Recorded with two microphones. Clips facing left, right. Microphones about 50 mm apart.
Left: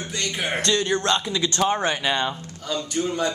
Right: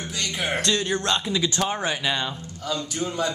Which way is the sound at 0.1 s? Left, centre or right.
Centre.